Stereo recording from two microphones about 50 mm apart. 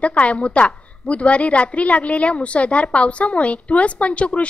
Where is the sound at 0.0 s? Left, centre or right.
Left.